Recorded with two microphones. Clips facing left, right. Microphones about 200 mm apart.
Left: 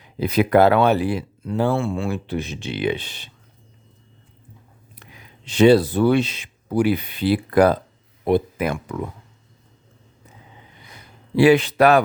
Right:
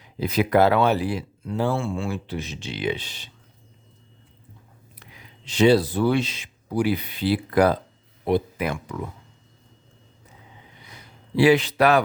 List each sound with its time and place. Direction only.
0.2 s speech: 60° left (ahead or behind)
5.5 s speech: 55° left (ahead or behind)
11.3 s a man's voice: 55° left (ahead or behind)